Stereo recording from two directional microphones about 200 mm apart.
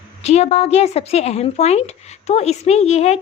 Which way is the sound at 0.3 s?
35° left (ahead or behind).